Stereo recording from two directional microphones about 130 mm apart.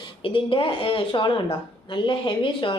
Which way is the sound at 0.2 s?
40° left (ahead or behind).